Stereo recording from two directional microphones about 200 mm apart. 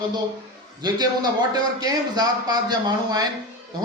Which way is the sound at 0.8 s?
20° right (ahead or behind).